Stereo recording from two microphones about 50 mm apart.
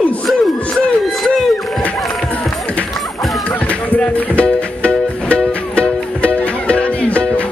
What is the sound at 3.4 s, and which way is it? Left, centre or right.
Speech, left.